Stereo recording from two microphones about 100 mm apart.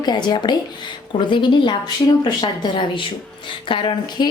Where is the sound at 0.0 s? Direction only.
45° left (ahead or behind).